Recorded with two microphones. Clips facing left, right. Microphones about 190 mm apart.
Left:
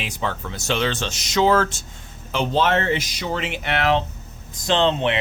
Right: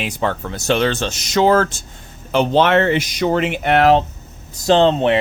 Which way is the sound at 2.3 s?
65° right (ahead or behind).